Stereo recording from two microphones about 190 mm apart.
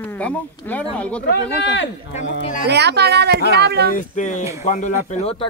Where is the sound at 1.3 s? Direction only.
70° left (ahead or behind).